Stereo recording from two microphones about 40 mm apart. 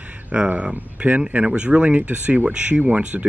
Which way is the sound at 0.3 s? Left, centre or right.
Right.